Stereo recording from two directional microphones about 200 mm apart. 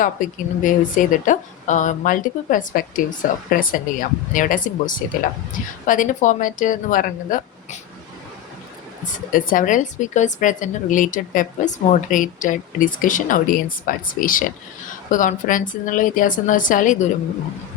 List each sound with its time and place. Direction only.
0.0 s speech: 40° left (ahead or behind)
9.1 s speech: 45° left (ahead or behind)